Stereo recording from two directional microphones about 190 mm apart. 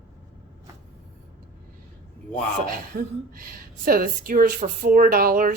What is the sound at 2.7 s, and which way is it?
A woman's voice, 50° right (ahead or behind).